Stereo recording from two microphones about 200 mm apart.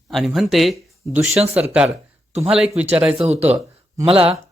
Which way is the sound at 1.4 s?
30° right (ahead or behind).